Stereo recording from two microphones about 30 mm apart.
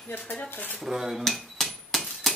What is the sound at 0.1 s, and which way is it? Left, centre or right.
Speech, left.